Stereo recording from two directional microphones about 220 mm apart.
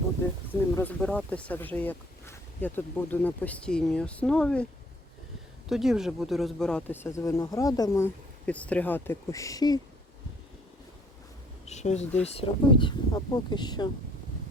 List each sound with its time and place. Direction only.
0.8 s speech: 5° left (ahead or behind)
5.6 s speech: centre (ahead or behind); by 9.8 s 15° left (ahead or behind)
11.6 s a sound: 30° left (ahead or behind)
12.2 s speech: 25° left (ahead or behind)